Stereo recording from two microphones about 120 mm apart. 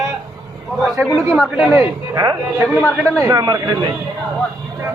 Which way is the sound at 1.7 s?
30° right (ahead or behind).